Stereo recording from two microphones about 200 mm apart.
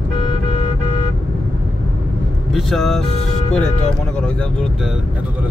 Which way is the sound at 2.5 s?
Centre (ahead or behind).